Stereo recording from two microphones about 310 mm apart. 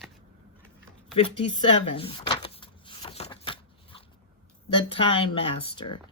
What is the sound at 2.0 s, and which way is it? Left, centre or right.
Shuffling cards, centre.